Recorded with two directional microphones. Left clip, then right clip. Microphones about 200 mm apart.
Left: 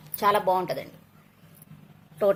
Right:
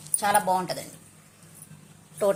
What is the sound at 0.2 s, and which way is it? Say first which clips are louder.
Speech: left 1 dB; 35° left (ahead or behind).